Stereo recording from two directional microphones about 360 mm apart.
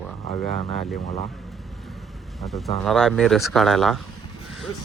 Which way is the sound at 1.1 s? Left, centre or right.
Centre.